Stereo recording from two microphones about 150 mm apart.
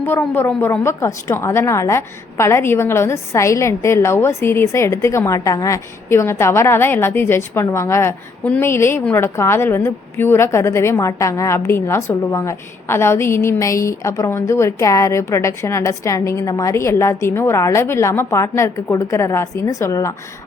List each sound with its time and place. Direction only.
0.0 s a woman's voice: 15° left (ahead or behind)